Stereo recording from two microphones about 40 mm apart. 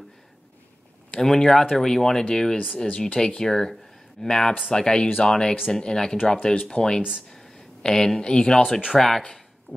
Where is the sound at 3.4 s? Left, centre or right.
Centre.